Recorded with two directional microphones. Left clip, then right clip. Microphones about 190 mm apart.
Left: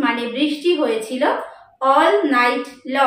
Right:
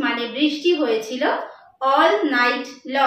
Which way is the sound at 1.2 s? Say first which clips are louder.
Left 2 dB; 15° left (ahead or behind).